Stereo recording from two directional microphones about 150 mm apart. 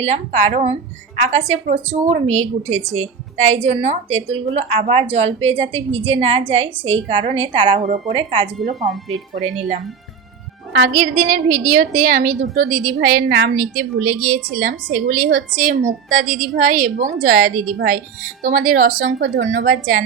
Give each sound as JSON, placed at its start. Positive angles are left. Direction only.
{"t": 0.0, "sound": "a woman's voice", "side_deg": -45}
{"t": 7.8, "sound": "a woman's voice", "side_deg": -55}
{"t": 8.1, "sound": "a woman's voice", "side_deg": -35}
{"t": 10.9, "sound": "a woman's voice", "side_deg": -70}